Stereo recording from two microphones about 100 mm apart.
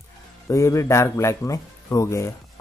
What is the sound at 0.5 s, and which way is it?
A man's voice, 30° left (ahead or behind).